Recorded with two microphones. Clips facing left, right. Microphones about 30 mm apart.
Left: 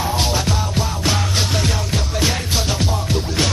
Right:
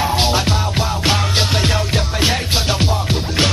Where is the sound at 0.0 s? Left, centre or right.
Right.